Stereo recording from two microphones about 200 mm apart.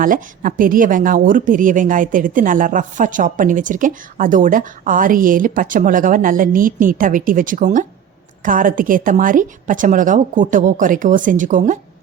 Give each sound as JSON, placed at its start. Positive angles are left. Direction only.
{"t": 0.0, "sound": "a woman's voice", "side_deg": -40}